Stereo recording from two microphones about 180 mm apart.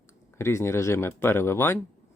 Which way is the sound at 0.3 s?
15° left (ahead or behind).